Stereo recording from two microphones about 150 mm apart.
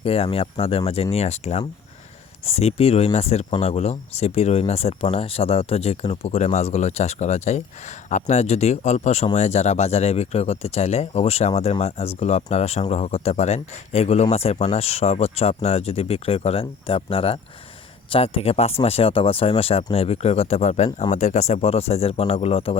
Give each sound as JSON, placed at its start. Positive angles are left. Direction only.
{"t": 0.0, "sound": "speech", "side_deg": 40}